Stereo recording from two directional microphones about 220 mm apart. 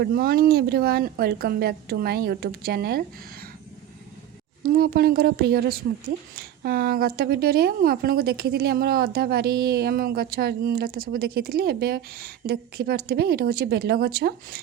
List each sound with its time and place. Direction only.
0.0 s a woman's voice: 45° right (ahead or behind)
4.6 s a woman's voice: 45° right (ahead or behind)